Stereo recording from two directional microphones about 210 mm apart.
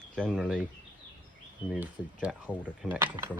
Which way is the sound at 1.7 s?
5° right (ahead or behind).